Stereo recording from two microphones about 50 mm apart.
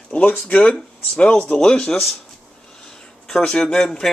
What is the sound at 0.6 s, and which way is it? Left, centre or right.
Speech, left.